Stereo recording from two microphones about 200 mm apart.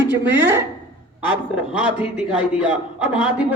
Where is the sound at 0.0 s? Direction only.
10° right (ahead or behind).